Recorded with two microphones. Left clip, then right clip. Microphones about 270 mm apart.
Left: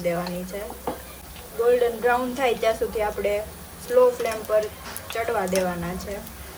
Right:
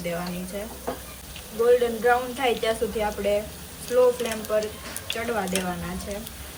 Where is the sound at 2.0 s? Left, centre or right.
Left.